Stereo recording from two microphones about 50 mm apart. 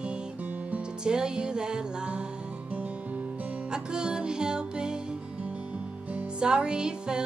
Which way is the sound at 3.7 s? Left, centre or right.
Centre.